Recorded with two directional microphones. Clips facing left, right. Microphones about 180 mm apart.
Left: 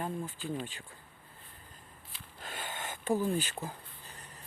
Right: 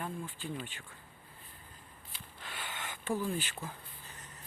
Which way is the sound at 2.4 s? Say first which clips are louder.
Left 3 dB; 45° left (ahead or behind).